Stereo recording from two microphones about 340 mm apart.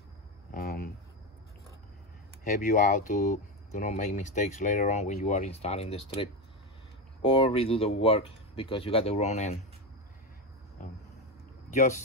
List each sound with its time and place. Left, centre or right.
0.5 s a sound: left
2.6 s speech: left
11.7 s speech: left